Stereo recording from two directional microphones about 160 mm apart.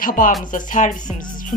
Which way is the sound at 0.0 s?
60° left (ahead or behind).